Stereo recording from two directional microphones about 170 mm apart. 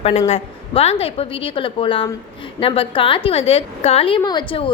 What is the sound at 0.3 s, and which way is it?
A woman's voice, 35° left (ahead or behind).